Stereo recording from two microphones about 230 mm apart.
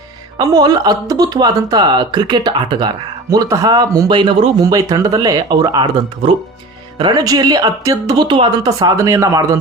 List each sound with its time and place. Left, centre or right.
0.3 s speech: centre